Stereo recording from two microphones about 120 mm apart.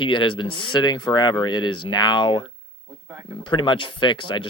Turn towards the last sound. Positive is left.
turn(degrees=45)  # may be behind; listen again after turning